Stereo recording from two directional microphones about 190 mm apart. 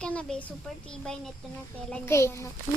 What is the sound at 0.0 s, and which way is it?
Speech, 5° left (ahead or behind).